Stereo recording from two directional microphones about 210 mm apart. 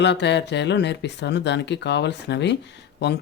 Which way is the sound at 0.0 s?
55° left (ahead or behind).